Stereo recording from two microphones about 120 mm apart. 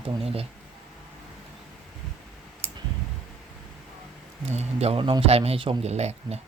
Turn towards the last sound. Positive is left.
turn(degrees=-65)  # may be behind; listen again after turning